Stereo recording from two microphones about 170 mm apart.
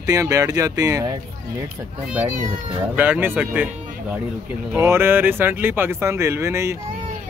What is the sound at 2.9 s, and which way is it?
Speech, 10° right (ahead or behind).